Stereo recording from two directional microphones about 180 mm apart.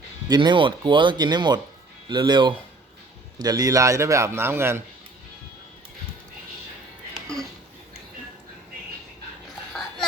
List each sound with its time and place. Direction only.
0.3 s a man's voice: 25° right (ahead or behind)